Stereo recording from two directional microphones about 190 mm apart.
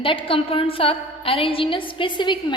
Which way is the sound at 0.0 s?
25° left (ahead or behind).